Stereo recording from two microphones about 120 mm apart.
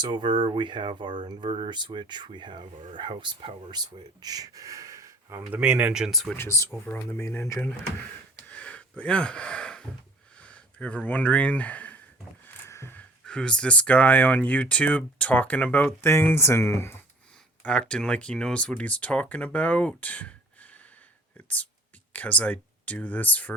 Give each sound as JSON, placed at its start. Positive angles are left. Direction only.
{"t": 0.0, "sound": "speech", "side_deg": -40}
{"t": 5.5, "sound": "speech", "side_deg": -10}
{"t": 6.3, "sound": "speech", "side_deg": 20}
{"t": 7.6, "sound": "a sound", "side_deg": 15}
{"t": 10.4, "sound": "speech", "side_deg": 10}
{"t": 17.6, "sound": "speech", "side_deg": 10}
{"t": 20.0, "sound": "gasp", "side_deg": 10}
{"t": 21.3, "sound": "whispering", "side_deg": 10}
{"t": 22.1, "sound": "speech", "side_deg": 10}